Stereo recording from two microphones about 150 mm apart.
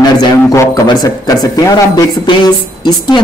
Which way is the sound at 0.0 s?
25° left (ahead or behind).